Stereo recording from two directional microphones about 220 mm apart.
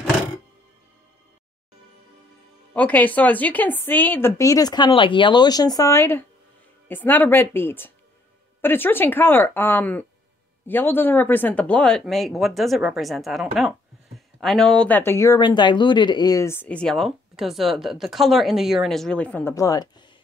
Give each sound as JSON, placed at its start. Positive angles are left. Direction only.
{"t": 2.7, "sound": "speech", "side_deg": 5}